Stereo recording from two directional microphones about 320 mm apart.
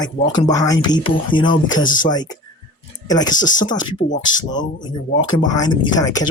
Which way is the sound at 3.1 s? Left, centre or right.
Centre.